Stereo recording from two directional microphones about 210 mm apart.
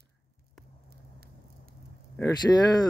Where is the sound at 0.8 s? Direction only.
50° right (ahead or behind).